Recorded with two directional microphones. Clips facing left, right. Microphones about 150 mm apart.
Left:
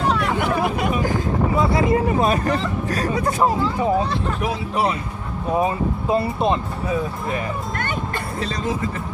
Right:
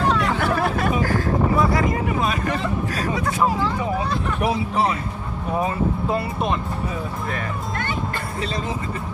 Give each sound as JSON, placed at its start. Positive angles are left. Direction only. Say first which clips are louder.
{"t": 0.1, "sound": "chatter", "louder": "even", "side_deg": 15}
{"t": 5.5, "sound": "speech", "louder": "left 1 dB", "side_deg": 20}